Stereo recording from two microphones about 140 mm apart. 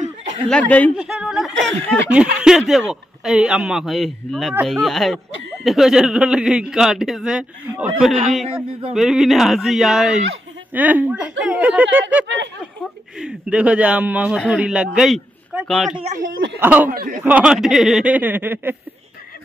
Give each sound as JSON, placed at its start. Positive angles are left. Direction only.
{"t": 0.5, "sound": "speech", "side_deg": 10}
{"t": 0.9, "sound": "speech", "side_deg": -5}
{"t": 16.9, "sound": "speech", "side_deg": -90}
{"t": 17.2, "sound": "speech", "side_deg": -10}